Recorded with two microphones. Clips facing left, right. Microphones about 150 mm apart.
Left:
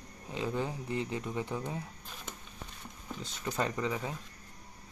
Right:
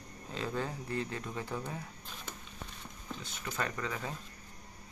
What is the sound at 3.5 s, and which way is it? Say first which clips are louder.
Speech: left 4 dB; 20° left (ahead or behind).